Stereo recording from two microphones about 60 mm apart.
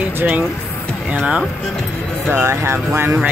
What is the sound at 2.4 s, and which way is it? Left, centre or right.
Speech, right.